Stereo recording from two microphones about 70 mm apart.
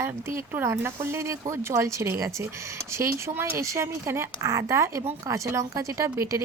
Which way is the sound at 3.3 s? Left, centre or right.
Right.